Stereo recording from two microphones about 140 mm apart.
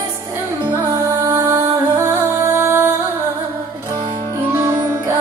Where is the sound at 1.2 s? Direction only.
20° right (ahead or behind).